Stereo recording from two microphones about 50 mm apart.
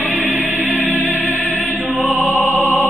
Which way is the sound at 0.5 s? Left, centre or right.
Right.